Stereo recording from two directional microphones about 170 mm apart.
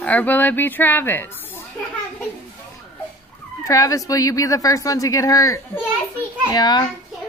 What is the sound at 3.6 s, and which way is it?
Speech, 20° left (ahead or behind).